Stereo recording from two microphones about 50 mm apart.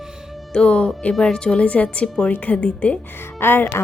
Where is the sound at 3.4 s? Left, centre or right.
Left.